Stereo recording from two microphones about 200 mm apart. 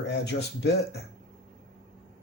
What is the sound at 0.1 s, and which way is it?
Speech, 60° left (ahead or behind).